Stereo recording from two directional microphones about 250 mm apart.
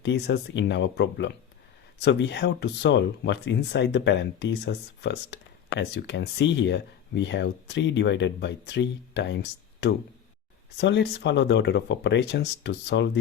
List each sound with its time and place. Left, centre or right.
0.0 s speech: left